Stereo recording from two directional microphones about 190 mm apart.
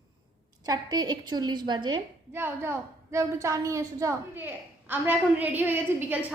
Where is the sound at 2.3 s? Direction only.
10° right (ahead or behind).